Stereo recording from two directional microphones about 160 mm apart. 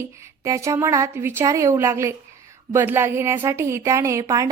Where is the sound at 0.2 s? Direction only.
20° right (ahead or behind).